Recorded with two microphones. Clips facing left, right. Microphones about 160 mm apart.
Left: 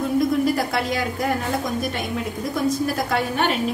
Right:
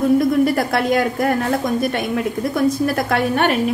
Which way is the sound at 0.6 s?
55° right (ahead or behind).